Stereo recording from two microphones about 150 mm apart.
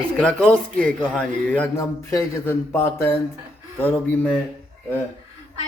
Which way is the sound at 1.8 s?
20° left (ahead or behind).